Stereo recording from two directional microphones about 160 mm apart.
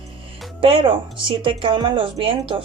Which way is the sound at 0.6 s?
35° right (ahead or behind).